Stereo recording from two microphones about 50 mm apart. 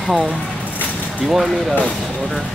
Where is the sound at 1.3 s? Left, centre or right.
Centre.